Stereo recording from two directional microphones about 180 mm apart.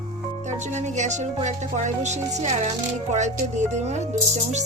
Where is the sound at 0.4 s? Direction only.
40° right (ahead or behind).